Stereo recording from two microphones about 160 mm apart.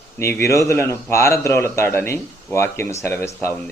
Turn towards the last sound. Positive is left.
turn(degrees=15)  # may be behind; listen again after turning